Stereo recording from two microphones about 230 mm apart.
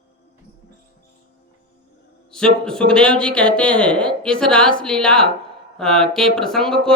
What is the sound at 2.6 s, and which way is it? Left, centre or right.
Speech, centre.